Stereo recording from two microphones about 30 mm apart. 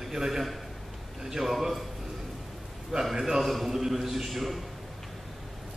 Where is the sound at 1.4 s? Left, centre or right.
Centre.